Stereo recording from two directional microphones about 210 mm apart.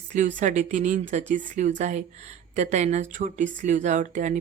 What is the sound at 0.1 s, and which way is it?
Speech, 35° right (ahead or behind).